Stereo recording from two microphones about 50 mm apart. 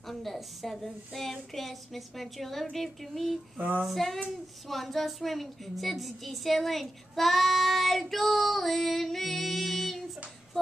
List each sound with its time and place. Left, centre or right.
0.1 s speech: centre
3.5 s female singing: right
3.8 s speech: centre